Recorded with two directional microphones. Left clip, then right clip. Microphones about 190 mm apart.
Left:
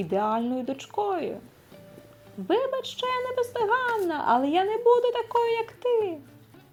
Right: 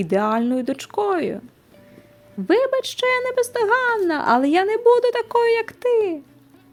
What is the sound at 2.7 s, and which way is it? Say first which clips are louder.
Speech: right 9 dB; 90° right.